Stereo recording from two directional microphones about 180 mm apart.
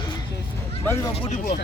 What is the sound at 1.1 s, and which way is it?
Speech, 30° left (ahead or behind).